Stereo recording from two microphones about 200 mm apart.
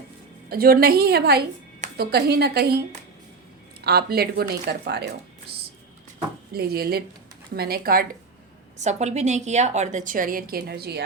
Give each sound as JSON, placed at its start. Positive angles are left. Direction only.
{"t": 0.5, "sound": "a woman's voice", "side_deg": -50}
{"t": 3.8, "sound": "a woman's voice", "side_deg": -50}
{"t": 6.5, "sound": "a woman's voice", "side_deg": -50}
{"t": 8.8, "sound": "a woman's voice", "side_deg": -35}